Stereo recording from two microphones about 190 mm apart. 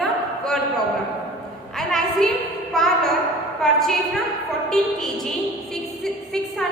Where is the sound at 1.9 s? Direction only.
Centre (ahead or behind).